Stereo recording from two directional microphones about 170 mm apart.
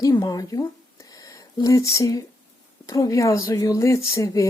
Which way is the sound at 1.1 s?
20° left (ahead or behind).